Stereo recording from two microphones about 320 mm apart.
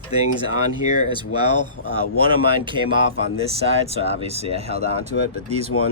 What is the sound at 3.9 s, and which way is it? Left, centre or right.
Speech, centre.